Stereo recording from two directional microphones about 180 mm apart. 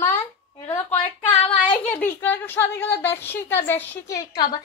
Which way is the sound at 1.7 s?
10° left (ahead or behind).